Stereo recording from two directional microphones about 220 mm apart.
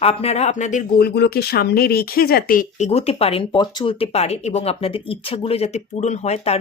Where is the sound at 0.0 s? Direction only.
25° left (ahead or behind).